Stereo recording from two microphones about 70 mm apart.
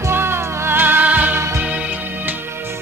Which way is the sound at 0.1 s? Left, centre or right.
Right.